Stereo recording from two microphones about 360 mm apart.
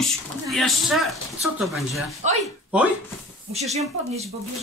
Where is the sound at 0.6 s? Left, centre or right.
Centre.